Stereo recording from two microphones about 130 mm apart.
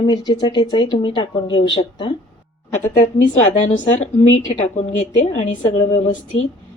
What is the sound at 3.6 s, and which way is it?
A woman's voice, 65° left (ahead or behind).